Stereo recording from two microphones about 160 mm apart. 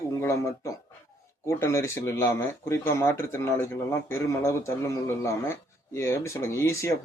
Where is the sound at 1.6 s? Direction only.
15° left (ahead or behind).